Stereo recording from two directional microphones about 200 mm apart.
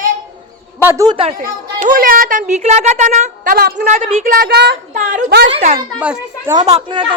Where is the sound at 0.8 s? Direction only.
15° right (ahead or behind).